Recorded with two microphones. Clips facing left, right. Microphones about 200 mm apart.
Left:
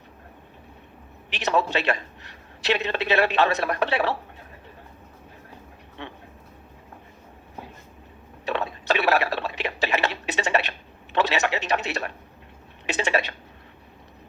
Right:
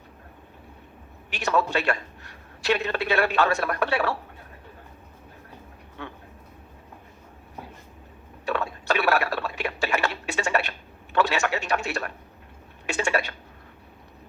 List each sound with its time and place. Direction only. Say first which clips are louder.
1.3 s speech: left 1 dB; 20° left (ahead or behind)
8.4 s speech: left 1 dB; 20° left (ahead or behind)